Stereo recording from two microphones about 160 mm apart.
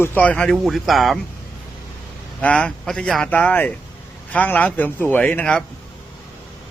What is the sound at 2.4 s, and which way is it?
Speech, 5° left (ahead or behind).